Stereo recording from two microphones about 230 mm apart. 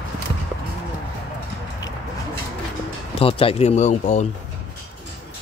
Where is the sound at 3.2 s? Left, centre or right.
Left.